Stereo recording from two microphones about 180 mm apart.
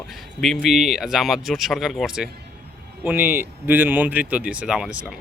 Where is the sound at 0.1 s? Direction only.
Centre (ahead or behind).